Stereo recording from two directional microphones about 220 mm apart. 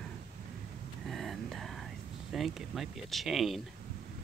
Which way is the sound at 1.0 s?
Centre (ahead or behind).